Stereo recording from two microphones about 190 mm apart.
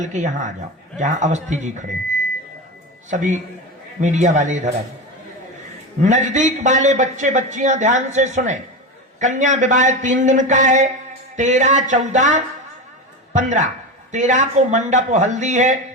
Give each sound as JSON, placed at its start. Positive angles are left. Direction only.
{"t": 0.0, "sound": "a man's voice", "side_deg": -40}
{"t": 3.1, "sound": "a man's voice", "side_deg": -40}
{"t": 6.0, "sound": "a man's voice", "side_deg": -40}